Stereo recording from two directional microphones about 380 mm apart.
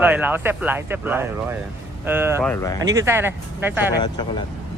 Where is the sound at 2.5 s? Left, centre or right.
Centre.